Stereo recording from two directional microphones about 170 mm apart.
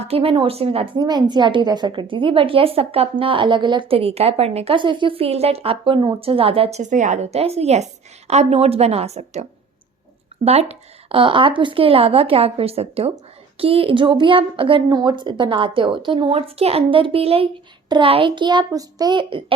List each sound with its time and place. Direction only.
0.0 s a woman's voice: 35° right (ahead or behind)